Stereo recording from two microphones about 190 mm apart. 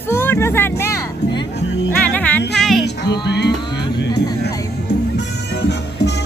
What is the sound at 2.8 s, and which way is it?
Music, 60° left (ahead or behind).